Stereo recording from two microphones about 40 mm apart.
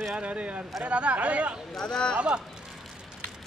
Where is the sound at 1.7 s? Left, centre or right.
Centre.